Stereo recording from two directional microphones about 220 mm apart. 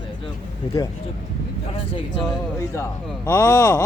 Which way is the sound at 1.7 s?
25° left (ahead or behind).